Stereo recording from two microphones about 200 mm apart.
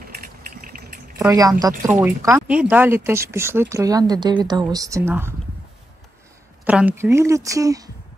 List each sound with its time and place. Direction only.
0.6 s a sound: 45° right (ahead or behind)
1.1 s speech: 15° right (ahead or behind)
6.6 s speech: 5° right (ahead or behind)